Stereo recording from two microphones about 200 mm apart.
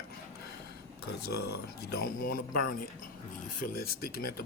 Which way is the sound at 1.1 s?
55° left (ahead or behind).